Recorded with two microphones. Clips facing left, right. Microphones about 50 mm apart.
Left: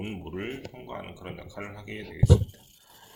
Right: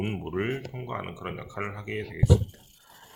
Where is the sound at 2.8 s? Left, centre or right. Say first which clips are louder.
Right 3 dB; right.